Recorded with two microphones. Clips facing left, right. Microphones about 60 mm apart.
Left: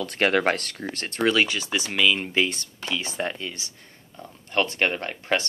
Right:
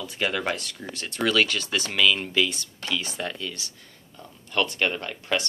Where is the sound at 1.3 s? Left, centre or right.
Centre.